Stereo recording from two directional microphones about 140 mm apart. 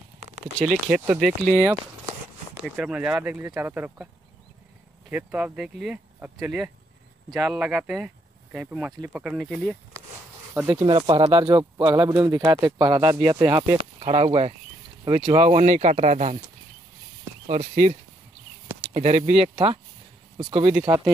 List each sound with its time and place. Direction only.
0.7 s speech: 5° right (ahead or behind)
1.5 s speech: 15° right (ahead or behind)
5.1 s speech: 10° right (ahead or behind)
10.5 s speech: 10° right (ahead or behind)
10.8 s speech: 35° right (ahead or behind)
13.9 s speech: 50° right (ahead or behind)
17.5 s speech: 50° right (ahead or behind)
18.9 s speech: 50° right (ahead or behind); by 21.1 s 30° right (ahead or behind)